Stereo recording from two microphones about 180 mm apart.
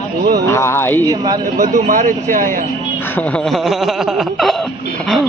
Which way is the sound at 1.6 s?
50° right (ahead or behind).